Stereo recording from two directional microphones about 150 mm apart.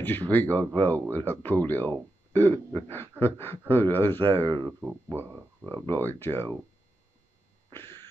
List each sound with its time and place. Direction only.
0.0 s speech: 10° left (ahead or behind)
4.5 s speech: 30° right (ahead or behind)
4.7 s speech: 15° right (ahead or behind)
5.9 s speech: 15° left (ahead or behind)
7.7 s a sound: 15° left (ahead or behind)